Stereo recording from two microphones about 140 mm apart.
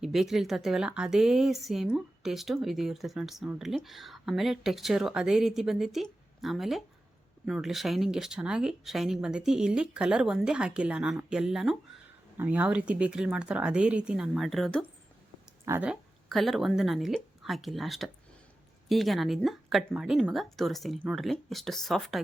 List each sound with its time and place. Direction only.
0.0 s speech: centre (ahead or behind)
15.6 s speech: 15° right (ahead or behind)
15.9 s speech: centre (ahead or behind)